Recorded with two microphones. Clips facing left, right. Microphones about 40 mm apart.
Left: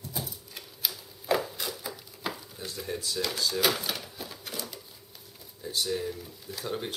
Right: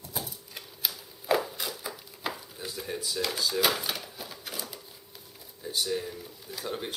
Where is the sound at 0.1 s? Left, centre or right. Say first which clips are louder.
Right 2 dB; centre.